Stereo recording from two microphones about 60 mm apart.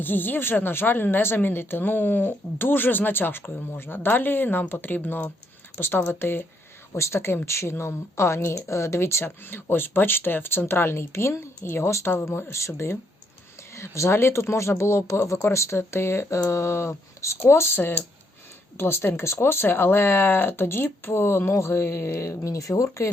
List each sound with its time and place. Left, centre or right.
0.0 s speech: left
6.9 s speech: left
22.4 s speech: left